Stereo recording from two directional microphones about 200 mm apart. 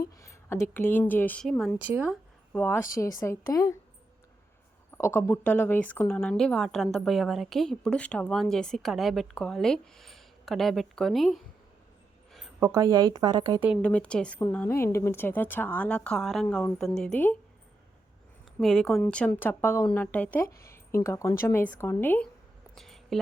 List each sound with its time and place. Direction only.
0.2 s a woman's voice: 15° left (ahead or behind); by 2.1 s 10° right (ahead or behind)
2.5 s a woman's voice: 10° left (ahead or behind)
4.9 s a woman's voice: 15° left (ahead or behind)
12.3 s a sound: centre (ahead or behind)
12.6 s speech: 15° right (ahead or behind)
13.8 s a woman's voice: 5° left (ahead or behind)
18.6 s a woman's voice: centre (ahead or behind)
22.7 s a sound: centre (ahead or behind)